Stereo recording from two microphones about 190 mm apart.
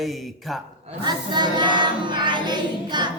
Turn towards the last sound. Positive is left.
turn(degrees=-25)  # may be behind; listen again after turning